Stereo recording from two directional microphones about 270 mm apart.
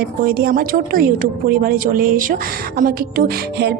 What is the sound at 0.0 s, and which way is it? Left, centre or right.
A woman's voice, right.